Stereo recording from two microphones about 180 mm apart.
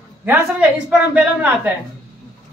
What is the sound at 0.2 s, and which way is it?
A man's voice, 10° right (ahead or behind).